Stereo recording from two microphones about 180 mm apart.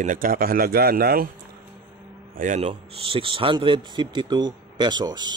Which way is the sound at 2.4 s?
45° right (ahead or behind).